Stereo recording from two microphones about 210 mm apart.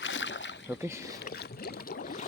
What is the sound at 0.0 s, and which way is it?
Boat, 60° left (ahead or behind).